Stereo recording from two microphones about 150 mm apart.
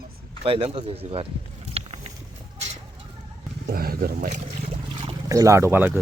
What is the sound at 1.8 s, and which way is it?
Walk, 40° right (ahead or behind).